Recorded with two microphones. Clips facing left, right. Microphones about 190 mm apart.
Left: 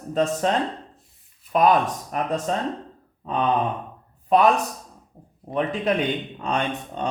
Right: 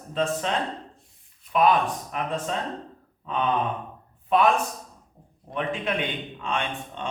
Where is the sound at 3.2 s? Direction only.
40° left (ahead or behind).